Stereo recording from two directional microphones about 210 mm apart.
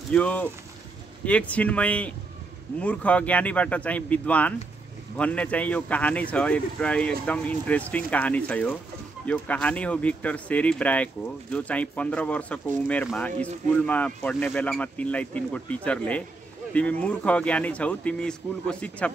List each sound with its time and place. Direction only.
0.1 s speech: 5° left (ahead or behind)